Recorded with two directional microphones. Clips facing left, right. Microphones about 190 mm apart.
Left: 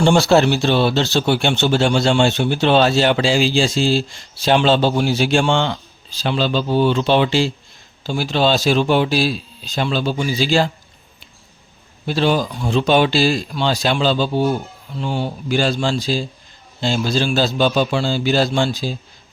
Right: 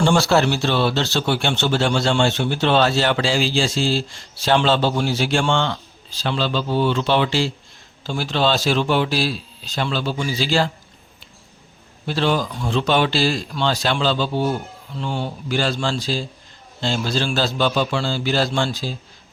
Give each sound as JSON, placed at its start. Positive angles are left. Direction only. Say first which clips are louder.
{"t": 0.0, "sound": "speech", "louder": "left 3 dB", "side_deg": 20}
{"t": 12.0, "sound": "speech", "louder": "left 3 dB", "side_deg": 15}